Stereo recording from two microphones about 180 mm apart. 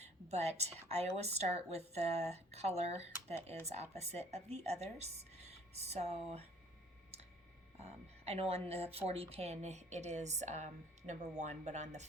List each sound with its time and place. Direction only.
0.0 s a sound: 35° right (ahead or behind)
0.9 s a woman's voice: 35° right (ahead or behind)
7.8 s a woman's voice: 35° right (ahead or behind)